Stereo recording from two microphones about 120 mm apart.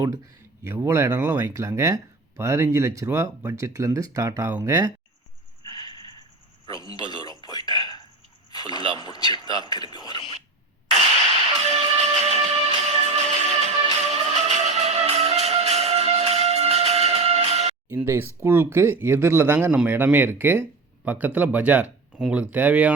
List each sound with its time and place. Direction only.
0.6 s speech: 20° right (ahead or behind)
5.6 s a sound: 35° left (ahead or behind)
9.0 s a man's voice: 35° left (ahead or behind)
11.6 s music: 65° right (ahead or behind)
17.8 s speech: 20° right (ahead or behind)